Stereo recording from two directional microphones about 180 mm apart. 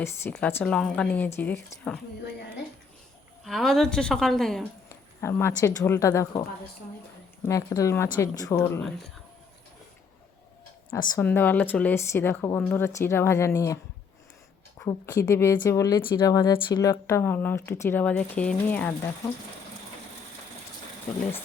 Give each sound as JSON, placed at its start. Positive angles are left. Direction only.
{"t": 0.0, "sound": "a woman's voice", "side_deg": 10}
{"t": 3.4, "sound": "a woman's voice", "side_deg": 0}
{"t": 4.9, "sound": "speech", "side_deg": 15}
{"t": 7.4, "sound": "speech", "side_deg": 15}
{"t": 8.5, "sound": "a woman's voice", "side_deg": 5}
{"t": 10.9, "sound": "speech", "side_deg": 15}
{"t": 14.8, "sound": "speech", "side_deg": 15}